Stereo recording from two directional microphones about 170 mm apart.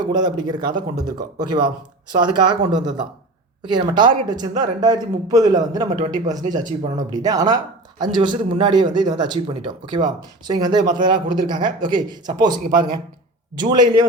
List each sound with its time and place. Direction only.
0.0 s speech: 25° right (ahead or behind)